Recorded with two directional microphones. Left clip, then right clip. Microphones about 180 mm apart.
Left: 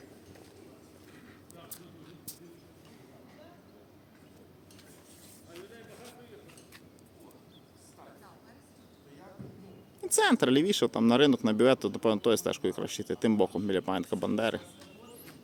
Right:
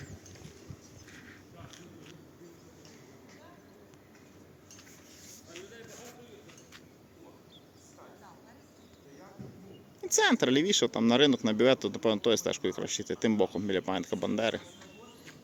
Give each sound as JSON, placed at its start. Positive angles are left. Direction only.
{"t": 10.0, "sound": "speech", "side_deg": 15}